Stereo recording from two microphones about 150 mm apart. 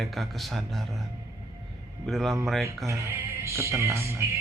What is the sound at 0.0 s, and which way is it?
A man's voice, centre (ahead or behind).